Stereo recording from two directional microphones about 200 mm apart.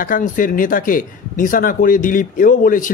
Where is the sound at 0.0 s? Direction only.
40° left (ahead or behind).